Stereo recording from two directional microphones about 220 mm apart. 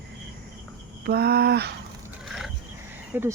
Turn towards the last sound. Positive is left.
turn(degrees=-10)  # may be behind; listen again after turning